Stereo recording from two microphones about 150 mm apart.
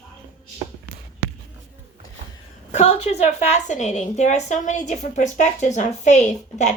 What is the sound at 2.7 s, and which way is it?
A woman's voice, 45° left (ahead or behind).